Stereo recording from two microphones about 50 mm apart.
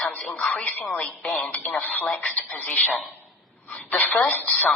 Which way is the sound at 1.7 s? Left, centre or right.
Left.